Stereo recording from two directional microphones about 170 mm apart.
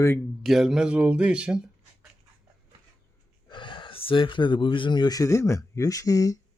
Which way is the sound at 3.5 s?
30° left (ahead or behind).